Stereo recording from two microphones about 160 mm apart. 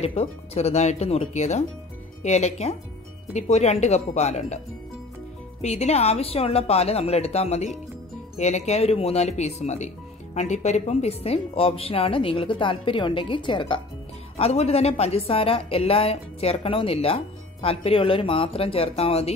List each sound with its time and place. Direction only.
0.0 s speech: 40° left (ahead or behind)
5.6 s a woman's voice: 40° left (ahead or behind)